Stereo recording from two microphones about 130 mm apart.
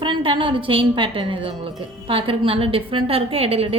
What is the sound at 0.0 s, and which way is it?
A woman's voice, 40° right (ahead or behind).